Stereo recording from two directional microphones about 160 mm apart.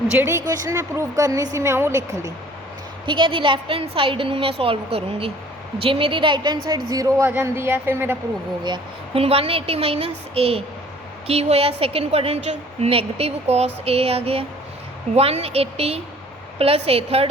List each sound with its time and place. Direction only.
0.2 s a woman's voice: 15° right (ahead or behind)
3.1 s a woman's voice: 30° right (ahead or behind); by 8.2 s 15° right (ahead or behind)
8.6 s a woman's voice: 30° right (ahead or behind)